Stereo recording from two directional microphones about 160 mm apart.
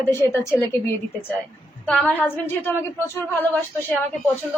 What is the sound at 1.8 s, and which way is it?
A woman's voice, 5° left (ahead or behind).